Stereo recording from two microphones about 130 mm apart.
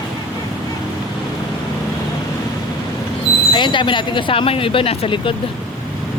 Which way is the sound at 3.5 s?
40° left (ahead or behind).